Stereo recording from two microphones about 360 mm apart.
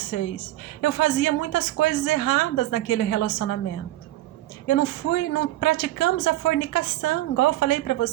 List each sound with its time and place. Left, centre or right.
0.1 s a woman's voice: left
4.7 s a woman's voice: left